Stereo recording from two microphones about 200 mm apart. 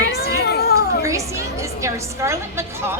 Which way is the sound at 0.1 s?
55° left (ahead or behind).